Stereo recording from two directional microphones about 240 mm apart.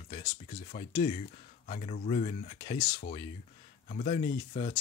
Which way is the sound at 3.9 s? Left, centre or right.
Left.